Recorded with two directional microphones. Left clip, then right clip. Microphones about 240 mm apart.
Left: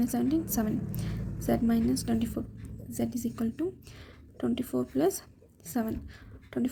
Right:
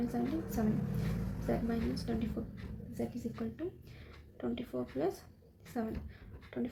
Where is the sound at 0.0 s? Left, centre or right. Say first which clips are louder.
Left 8 dB; left.